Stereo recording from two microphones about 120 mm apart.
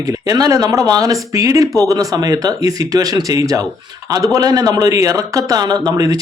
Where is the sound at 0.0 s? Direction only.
30° right (ahead or behind).